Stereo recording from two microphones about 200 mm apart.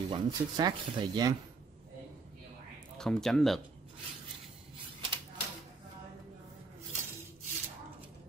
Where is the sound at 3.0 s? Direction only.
5° left (ahead or behind).